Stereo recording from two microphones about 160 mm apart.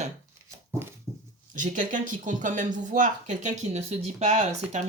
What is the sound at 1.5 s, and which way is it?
Speech, 55° right (ahead or behind).